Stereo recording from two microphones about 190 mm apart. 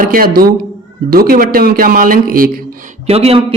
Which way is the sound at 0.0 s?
50° right (ahead or behind).